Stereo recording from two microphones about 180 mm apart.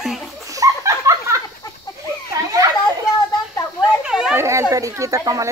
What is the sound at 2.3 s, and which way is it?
Children playing, 20° right (ahead or behind).